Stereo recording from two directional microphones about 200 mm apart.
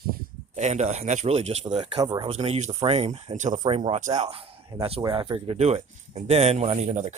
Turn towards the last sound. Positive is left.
turn(degrees=-35)  # may be behind; listen again after turning